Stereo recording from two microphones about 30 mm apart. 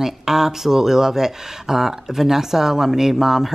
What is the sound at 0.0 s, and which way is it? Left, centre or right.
Speech, centre.